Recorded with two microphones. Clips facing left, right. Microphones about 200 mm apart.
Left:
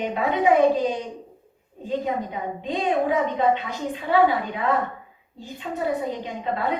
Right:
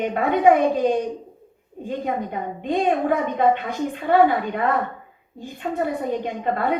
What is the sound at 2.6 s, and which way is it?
A woman's voice, 55° right (ahead or behind).